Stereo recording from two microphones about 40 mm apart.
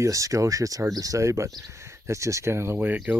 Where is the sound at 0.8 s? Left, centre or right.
Right.